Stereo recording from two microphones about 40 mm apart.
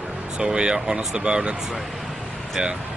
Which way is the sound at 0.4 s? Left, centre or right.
Right.